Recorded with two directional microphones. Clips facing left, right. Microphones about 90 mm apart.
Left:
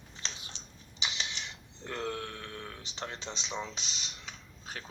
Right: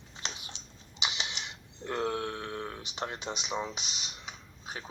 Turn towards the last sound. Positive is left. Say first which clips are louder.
# right 2 dB
turn(degrees=-10)  # may be behind; listen again after turning